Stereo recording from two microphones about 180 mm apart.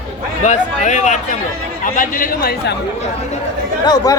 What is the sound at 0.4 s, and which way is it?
Speech, 40° left (ahead or behind).